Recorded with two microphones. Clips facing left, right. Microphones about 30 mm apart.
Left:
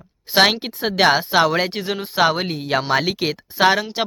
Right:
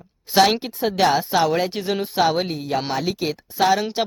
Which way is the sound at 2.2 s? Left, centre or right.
Left.